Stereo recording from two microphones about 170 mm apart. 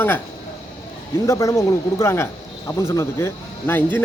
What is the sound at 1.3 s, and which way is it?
Speech, 15° left (ahead or behind).